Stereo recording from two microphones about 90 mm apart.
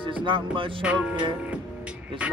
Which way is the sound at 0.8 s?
10° right (ahead or behind).